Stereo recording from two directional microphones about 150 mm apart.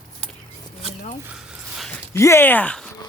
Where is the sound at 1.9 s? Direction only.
20° left (ahead or behind).